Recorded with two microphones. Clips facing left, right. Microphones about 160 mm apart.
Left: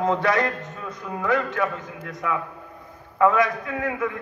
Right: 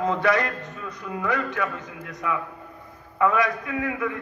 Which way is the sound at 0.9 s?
25° left (ahead or behind).